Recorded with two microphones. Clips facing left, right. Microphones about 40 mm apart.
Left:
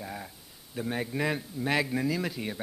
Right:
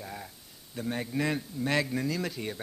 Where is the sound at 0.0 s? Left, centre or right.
Centre.